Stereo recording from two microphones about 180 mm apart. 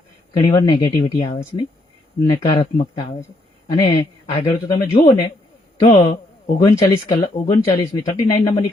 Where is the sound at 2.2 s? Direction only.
25° left (ahead or behind).